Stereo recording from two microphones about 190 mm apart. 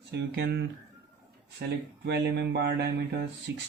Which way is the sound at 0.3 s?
65° right (ahead or behind).